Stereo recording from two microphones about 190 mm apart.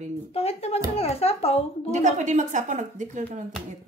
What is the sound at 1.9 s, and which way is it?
A woman's voice, 40° right (ahead or behind).